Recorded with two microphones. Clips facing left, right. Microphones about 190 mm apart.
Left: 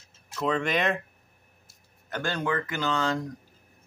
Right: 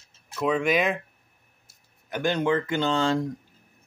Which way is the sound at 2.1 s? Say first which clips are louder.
Right 5 dB; 15° right (ahead or behind).